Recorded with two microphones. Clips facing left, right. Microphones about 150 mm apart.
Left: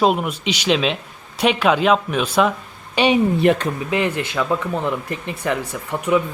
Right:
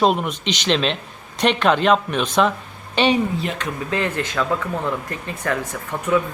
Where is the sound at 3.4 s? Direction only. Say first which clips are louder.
Left 12 dB; 65° left (ahead or behind).